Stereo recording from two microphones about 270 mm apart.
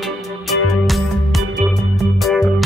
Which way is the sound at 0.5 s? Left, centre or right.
Left.